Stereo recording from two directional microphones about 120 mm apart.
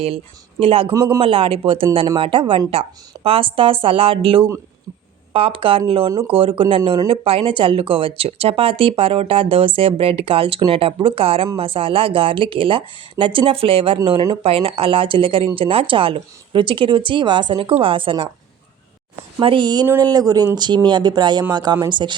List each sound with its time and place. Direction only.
0.6 s speech: 50° right (ahead or behind)
0.9 s a man's voice: 25° right (ahead or behind)
1.2 s speech: 50° right (ahead or behind)
14.4 s speech: 50° right (ahead or behind)
19.4 s speech: 45° right (ahead or behind)